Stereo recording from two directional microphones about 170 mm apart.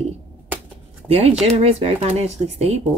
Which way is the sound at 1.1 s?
35° right (ahead or behind).